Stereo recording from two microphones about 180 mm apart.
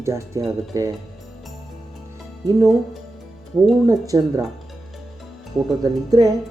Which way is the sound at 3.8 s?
20° right (ahead or behind).